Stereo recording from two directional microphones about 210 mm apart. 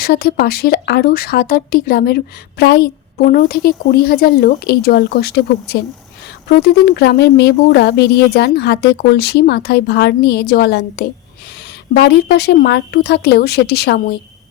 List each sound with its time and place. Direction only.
0.0 s speech: 45° left (ahead or behind)